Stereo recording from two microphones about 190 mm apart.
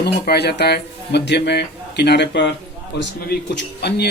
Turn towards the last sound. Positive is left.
turn(degrees=60)  # may be behind; listen again after turning